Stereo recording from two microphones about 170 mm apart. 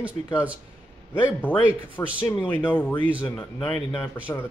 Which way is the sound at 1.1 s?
10° left (ahead or behind).